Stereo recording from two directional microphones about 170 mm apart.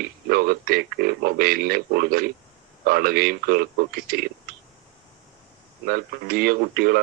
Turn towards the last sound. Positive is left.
turn(degrees=-65)  # may be behind; listen again after turning